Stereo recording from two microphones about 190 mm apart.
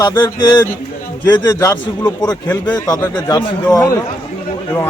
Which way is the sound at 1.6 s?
20° left (ahead or behind).